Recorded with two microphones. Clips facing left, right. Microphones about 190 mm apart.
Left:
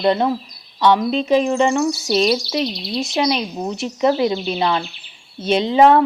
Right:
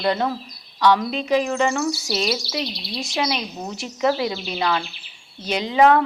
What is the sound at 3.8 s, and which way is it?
Speech, 20° left (ahead or behind).